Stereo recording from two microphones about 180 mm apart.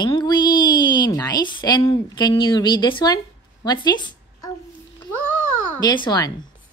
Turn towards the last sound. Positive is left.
turn(degrees=25)  # may be behind; listen again after turning